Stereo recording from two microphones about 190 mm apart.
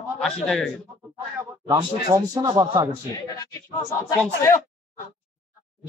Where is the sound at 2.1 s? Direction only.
15° right (ahead or behind).